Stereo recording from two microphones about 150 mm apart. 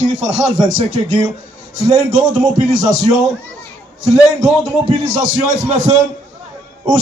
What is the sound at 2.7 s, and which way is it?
Speech, 55° right (ahead or behind).